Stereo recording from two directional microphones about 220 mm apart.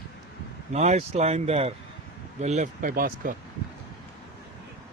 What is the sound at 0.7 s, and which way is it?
Speech, 30° right (ahead or behind).